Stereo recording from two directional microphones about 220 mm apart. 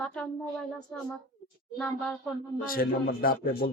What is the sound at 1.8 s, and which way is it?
Speech, 5° left (ahead or behind).